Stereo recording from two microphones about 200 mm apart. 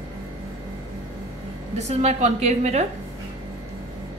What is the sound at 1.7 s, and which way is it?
A woman's voice, 35° right (ahead or behind).